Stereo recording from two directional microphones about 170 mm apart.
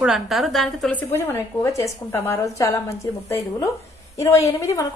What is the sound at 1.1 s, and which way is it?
A woman's voice, 15° left (ahead or behind).